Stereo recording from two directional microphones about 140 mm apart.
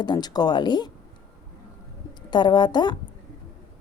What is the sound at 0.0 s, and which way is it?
Speech, 30° left (ahead or behind).